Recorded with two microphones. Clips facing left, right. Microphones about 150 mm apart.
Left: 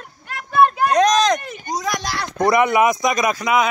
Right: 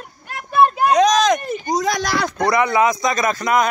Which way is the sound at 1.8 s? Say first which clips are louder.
Right 4 dB; 85° right.